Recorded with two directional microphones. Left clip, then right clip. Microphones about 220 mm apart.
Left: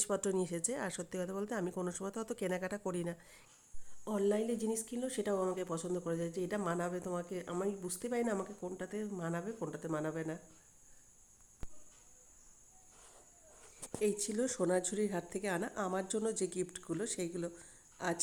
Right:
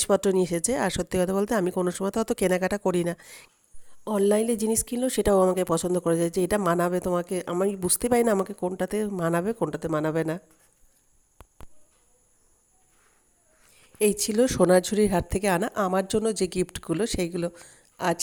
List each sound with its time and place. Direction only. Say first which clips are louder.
0.0 s a woman's voice: right 13 dB; 40° right (ahead or behind)
14.0 s speech: right 13 dB; 40° right (ahead or behind)